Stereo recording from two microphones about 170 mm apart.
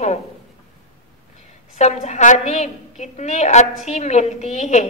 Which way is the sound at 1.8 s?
40° left (ahead or behind).